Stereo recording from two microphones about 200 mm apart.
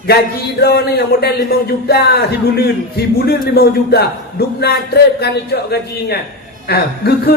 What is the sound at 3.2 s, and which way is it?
A man's voice, 50° left (ahead or behind).